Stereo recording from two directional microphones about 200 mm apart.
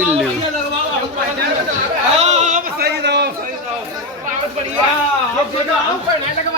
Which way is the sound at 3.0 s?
55° right (ahead or behind).